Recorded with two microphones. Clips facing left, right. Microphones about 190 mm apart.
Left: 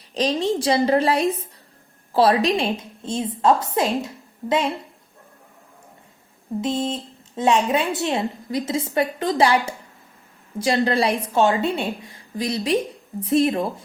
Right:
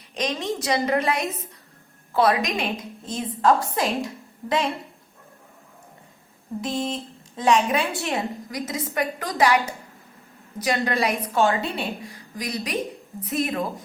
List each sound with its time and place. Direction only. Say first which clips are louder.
0.1 s a woman's voice: left 6 dB; 35° left (ahead or behind)
6.6 s a woman's voice: left 3 dB; 25° left (ahead or behind)